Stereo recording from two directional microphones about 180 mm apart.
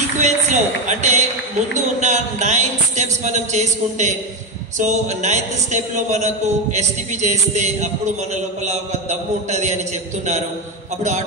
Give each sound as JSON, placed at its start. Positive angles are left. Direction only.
{"t": 0.2, "sound": "speech", "side_deg": -40}
{"t": 9.5, "sound": "speech", "side_deg": -40}